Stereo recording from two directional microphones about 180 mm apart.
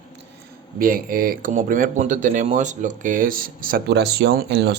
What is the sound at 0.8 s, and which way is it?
Speech, 50° right (ahead or behind).